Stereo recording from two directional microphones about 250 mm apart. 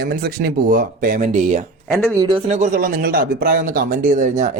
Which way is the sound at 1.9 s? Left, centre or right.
Centre.